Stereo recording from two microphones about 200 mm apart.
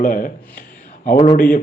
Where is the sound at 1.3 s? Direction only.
40° left (ahead or behind).